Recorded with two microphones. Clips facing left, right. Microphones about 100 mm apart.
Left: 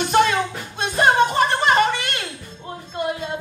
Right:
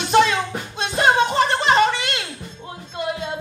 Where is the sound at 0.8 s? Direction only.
50° left (ahead or behind).